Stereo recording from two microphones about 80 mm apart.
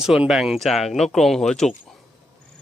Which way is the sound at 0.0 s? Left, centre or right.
Centre.